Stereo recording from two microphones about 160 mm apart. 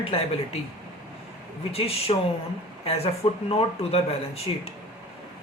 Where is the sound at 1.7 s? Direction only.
40° left (ahead or behind).